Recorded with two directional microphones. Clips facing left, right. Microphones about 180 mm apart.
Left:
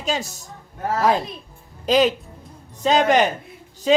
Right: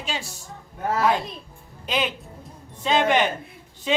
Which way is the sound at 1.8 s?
40° left (ahead or behind).